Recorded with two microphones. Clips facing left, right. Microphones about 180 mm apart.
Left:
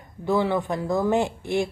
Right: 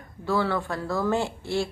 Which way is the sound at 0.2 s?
20° left (ahead or behind).